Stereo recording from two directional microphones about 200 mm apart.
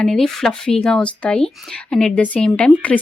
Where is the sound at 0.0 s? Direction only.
5° left (ahead or behind).